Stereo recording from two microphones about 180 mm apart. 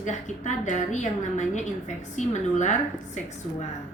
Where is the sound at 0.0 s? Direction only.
40° left (ahead or behind).